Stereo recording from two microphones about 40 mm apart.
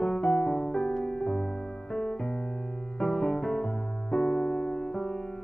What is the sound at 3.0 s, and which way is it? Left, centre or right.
Music, centre.